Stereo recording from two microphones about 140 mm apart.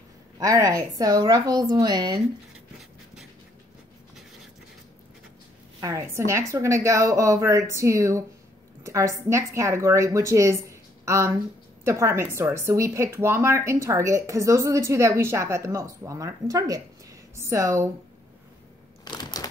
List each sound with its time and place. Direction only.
0.4 s speech: 25° right (ahead or behind)
5.8 s speech: 25° right (ahead or behind)
19.0 s a sound: 30° left (ahead or behind)